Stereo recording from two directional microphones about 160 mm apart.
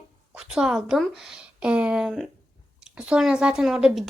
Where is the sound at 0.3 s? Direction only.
5° right (ahead or behind).